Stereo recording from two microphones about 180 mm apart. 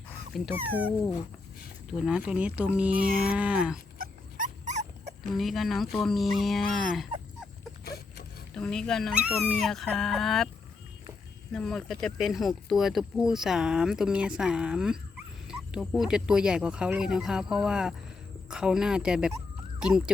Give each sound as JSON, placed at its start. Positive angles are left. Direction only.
{"t": 0.5, "sound": "speech", "side_deg": -10}
{"t": 3.9, "sound": "dog", "side_deg": -50}
{"t": 5.3, "sound": "speech", "side_deg": 0}
{"t": 8.5, "sound": "speech", "side_deg": 5}
{"t": 11.5, "sound": "speech", "side_deg": 0}